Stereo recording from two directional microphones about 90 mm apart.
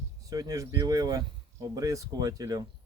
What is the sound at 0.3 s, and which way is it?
Speech, 40° right (ahead or behind).